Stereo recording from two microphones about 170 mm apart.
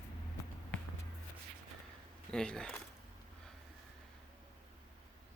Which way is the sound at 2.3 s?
5° left (ahead or behind).